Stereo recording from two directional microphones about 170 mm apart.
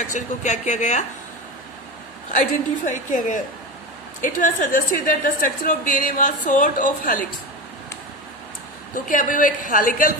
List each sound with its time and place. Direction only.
0.0 s a woman's voice: 45° left (ahead or behind)
2.3 s a woman's voice: 50° left (ahead or behind)
8.9 s a woman's voice: 50° left (ahead or behind)